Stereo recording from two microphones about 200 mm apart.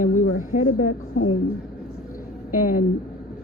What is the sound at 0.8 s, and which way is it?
Speech, 90° left.